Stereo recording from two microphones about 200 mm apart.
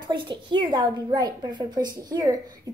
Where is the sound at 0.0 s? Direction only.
25° right (ahead or behind).